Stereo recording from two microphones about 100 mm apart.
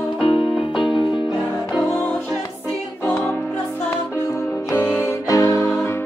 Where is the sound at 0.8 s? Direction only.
55° left (ahead or behind).